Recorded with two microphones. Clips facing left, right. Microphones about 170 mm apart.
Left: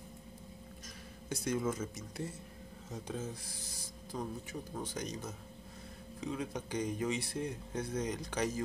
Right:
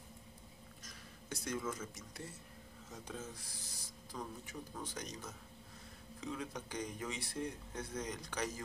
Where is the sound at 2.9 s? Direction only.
30° left (ahead or behind).